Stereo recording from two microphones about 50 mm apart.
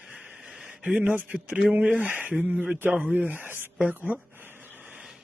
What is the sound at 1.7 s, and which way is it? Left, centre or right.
Speech, right.